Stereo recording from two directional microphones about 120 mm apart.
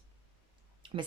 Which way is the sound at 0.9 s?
50° right (ahead or behind).